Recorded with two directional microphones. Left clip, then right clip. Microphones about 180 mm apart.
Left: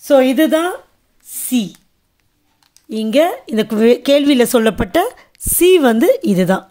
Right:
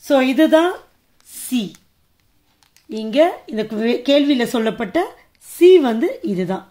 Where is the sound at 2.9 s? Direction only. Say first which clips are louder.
Left 2 dB; 50° left (ahead or behind); by 6.6 s 65° left (ahead or behind).